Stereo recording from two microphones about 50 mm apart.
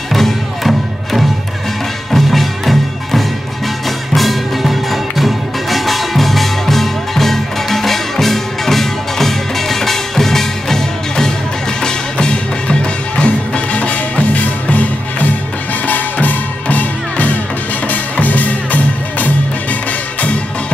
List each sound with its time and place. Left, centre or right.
0.1 s music: centre; by 19.3 s left